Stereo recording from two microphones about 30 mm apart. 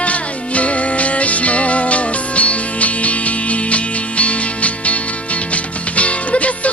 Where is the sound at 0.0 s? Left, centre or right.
Left.